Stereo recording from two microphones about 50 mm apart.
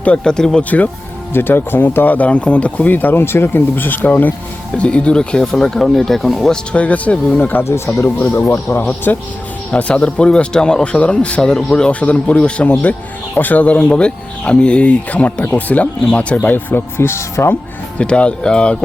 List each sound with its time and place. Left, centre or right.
0.3 s speech: centre
1.3 s speech: left
4.8 s speech: left; by 6.5 s centre
6.7 s speech: left
7.3 s speech: left
8.0 s speech: left
9.1 s speech: left
9.7 s speech: left
12.8 s speech: left
16.7 s speech: left
17.9 s speech: left